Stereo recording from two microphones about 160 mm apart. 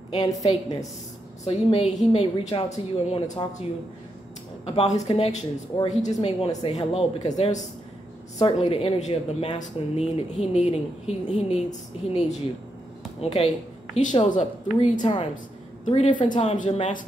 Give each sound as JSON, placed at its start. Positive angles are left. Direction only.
{"t": 0.1, "sound": "a woman's voice", "side_deg": 25}
{"t": 1.4, "sound": "speech", "side_deg": 35}
{"t": 4.6, "sound": "speech", "side_deg": 40}
{"t": 8.4, "sound": "speech", "side_deg": 35}